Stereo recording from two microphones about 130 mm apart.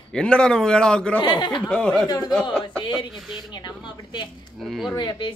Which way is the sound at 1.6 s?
5° left (ahead or behind).